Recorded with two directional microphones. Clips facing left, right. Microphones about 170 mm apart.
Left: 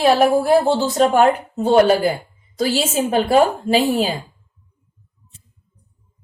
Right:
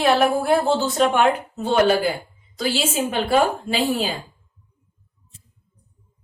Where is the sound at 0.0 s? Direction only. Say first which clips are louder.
Left 4 dB; 35° left (ahead or behind).